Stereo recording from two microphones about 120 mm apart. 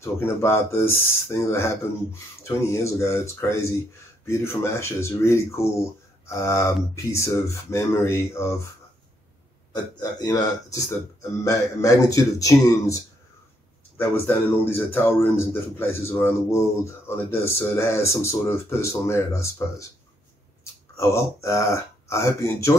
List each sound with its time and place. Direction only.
0.0 s a man's voice: 20° left (ahead or behind)
9.7 s a man's voice: 35° left (ahead or behind)
20.9 s a man's voice: 25° left (ahead or behind)